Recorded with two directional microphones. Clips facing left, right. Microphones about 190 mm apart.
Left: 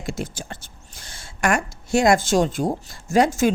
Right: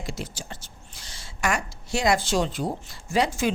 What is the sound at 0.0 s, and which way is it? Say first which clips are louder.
Speech: left 5 dB; 50° left (ahead or behind).